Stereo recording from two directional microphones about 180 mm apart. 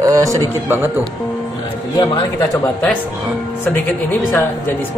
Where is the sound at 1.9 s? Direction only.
25° left (ahead or behind).